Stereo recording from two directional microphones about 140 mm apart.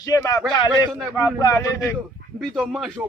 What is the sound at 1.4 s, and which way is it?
Speech, 20° left (ahead or behind).